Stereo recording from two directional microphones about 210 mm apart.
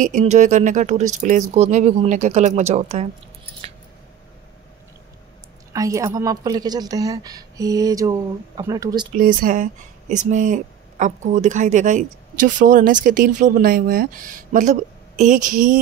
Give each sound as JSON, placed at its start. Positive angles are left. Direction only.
{"t": 0.0, "sound": "speech", "side_deg": -35}
{"t": 5.7, "sound": "a woman's voice", "side_deg": -15}
{"t": 9.1, "sound": "speech", "side_deg": -40}